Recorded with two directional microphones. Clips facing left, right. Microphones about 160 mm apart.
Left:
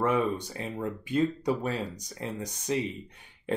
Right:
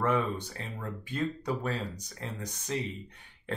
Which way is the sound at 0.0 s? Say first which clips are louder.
Left 3 dB; 15° left (ahead or behind).